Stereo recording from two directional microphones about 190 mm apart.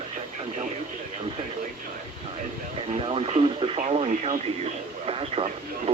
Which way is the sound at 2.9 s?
30° right (ahead or behind).